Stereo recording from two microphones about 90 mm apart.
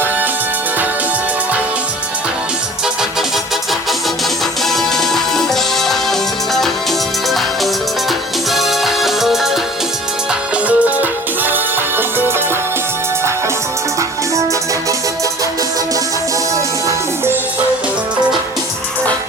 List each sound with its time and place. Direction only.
2.8 s music: 5° right (ahead or behind)
4.6 s music: 5° left (ahead or behind)
10.7 s music: 20° right (ahead or behind)
16.6 s music: 35° right (ahead or behind)